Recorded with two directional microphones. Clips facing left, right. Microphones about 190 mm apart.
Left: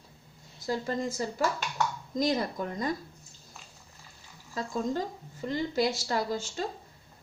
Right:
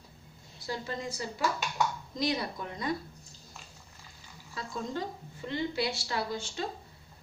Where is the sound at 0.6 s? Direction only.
45° left (ahead or behind).